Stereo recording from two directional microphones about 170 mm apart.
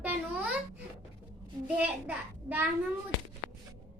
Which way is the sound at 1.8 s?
10° right (ahead or behind).